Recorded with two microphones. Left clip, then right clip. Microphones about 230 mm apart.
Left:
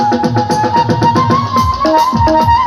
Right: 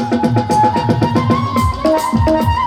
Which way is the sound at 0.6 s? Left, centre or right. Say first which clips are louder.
Even; right.